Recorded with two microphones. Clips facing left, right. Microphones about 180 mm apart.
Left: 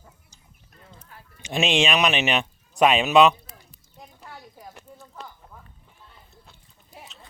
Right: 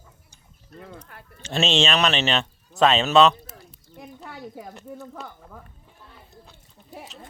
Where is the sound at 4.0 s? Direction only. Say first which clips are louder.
Right 5 dB; 65° right (ahead or behind).